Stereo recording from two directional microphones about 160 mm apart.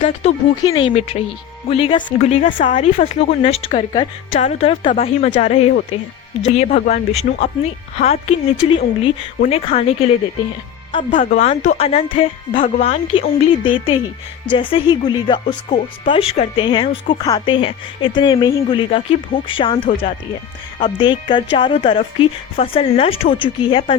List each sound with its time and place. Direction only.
0.0 s speech: 40° left (ahead or behind)
0.6 s speech: 25° left (ahead or behind)
11.3 s speech: 50° left (ahead or behind)
11.8 s speech: 40° left (ahead or behind)